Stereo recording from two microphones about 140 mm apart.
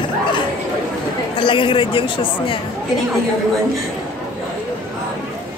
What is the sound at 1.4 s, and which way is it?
Speech, 35° left (ahead or behind).